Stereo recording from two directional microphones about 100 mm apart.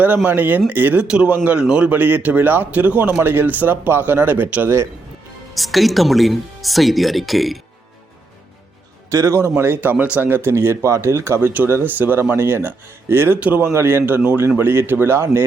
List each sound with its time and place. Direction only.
0.3 s speech: 20° right (ahead or behind)
5.5 s speech: centre (ahead or behind)
9.0 s speech: 30° right (ahead or behind)